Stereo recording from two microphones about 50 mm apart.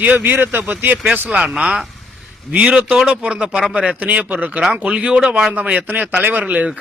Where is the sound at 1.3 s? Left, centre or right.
Right.